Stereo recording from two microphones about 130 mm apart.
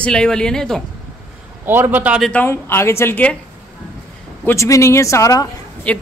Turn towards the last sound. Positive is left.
turn(degrees=10)  # may be behind; listen again after turning